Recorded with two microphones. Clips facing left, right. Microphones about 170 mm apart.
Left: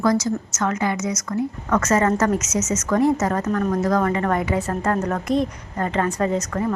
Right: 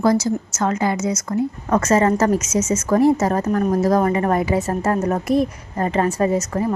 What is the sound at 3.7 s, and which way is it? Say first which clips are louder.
Speech: right 4 dB; 10° right (ahead or behind).